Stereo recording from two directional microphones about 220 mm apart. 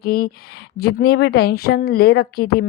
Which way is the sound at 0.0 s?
45° left (ahead or behind).